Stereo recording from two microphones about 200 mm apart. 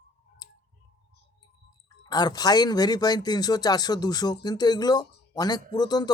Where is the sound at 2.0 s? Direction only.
20° left (ahead or behind).